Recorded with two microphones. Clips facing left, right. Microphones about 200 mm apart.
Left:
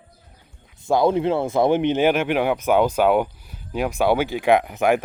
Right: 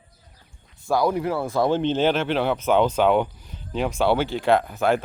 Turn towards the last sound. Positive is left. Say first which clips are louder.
# left 2 dB
turn(degrees=15)  # may be behind; listen again after turning